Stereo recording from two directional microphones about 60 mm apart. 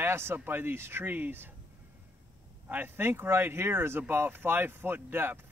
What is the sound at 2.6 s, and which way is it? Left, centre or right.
Speech, right.